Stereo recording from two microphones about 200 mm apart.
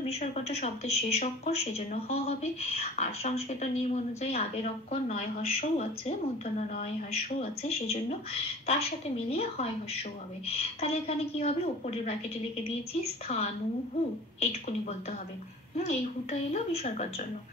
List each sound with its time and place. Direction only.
0.1 s a woman's voice: 35° left (ahead or behind)
13.3 s a woman's voice: 30° left (ahead or behind)